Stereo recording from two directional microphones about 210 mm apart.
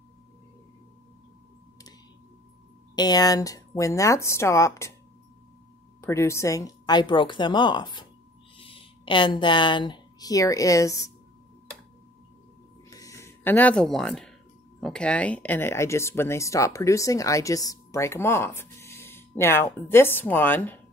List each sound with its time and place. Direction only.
3.0 s speech: 20° left (ahead or behind)
5.9 s speech: 15° left (ahead or behind)
12.9 s a sound: 15° left (ahead or behind)
14.8 s speech: 5° left (ahead or behind)